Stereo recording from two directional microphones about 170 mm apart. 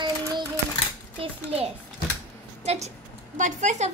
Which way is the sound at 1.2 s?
35° right (ahead or behind).